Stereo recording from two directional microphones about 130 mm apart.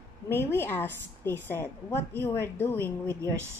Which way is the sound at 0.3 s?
15° left (ahead or behind).